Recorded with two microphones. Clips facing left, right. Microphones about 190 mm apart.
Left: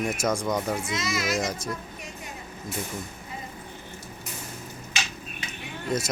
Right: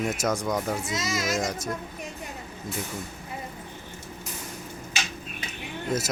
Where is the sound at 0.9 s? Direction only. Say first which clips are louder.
Even; 40° right (ahead or behind).